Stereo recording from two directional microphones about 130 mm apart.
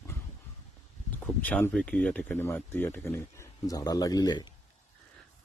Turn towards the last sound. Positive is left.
turn(degrees=35)  # may be behind; listen again after turning